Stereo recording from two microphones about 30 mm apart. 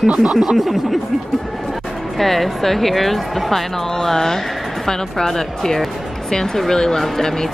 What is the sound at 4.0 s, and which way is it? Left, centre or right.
Speech, centre.